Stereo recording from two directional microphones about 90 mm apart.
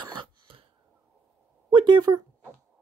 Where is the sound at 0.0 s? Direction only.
55° right (ahead or behind).